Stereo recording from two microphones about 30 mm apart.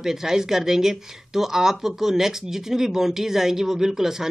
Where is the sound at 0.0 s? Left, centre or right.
Centre.